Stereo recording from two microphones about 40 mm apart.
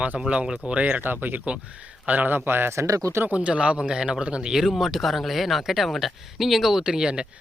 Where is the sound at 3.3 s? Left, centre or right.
Right.